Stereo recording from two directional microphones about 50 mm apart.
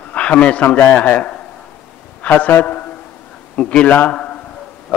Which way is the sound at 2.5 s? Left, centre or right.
Left.